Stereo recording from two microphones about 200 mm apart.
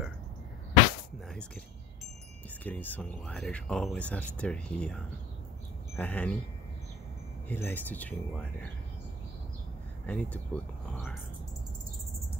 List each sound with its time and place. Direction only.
2.6 s speech: 10° left (ahead or behind)
7.4 s speech: 10° left (ahead or behind)
10.0 s speech: 5° left (ahead or behind)